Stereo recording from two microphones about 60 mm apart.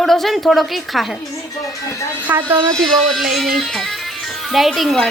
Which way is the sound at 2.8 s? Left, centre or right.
Centre.